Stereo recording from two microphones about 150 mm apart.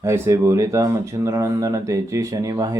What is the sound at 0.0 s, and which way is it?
Speech, 20° right (ahead or behind).